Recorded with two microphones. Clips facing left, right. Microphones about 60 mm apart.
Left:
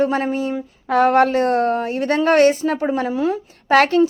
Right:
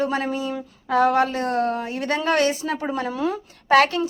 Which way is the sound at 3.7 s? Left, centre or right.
Left.